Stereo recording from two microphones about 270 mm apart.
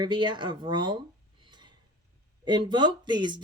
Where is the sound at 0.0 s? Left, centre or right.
Centre.